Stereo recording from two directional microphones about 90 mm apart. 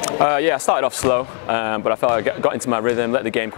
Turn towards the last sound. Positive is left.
turn(degrees=15)  # may be behind; listen again after turning